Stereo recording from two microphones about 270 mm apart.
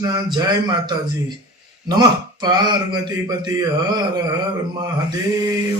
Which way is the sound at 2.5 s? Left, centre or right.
Centre.